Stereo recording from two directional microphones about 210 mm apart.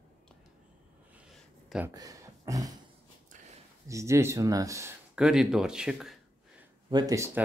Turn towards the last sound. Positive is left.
turn(degrees=-15)  # may be behind; listen again after turning